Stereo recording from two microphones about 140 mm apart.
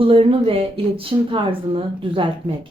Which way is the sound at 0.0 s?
40° right (ahead or behind).